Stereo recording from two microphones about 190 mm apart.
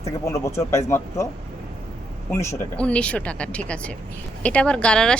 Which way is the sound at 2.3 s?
15° left (ahead or behind).